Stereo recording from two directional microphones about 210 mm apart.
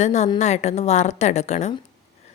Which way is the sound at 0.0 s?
35° left (ahead or behind).